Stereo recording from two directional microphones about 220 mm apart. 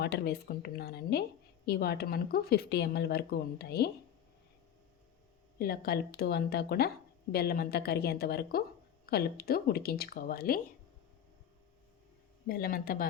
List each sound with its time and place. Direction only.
0.0 s a woman's voice: 45° left (ahead or behind)
5.5 s a woman's voice: 45° left (ahead or behind)
12.5 s speech: 40° left (ahead or behind)